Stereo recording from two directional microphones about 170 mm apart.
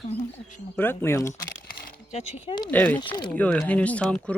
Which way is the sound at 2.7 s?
10° left (ahead or behind).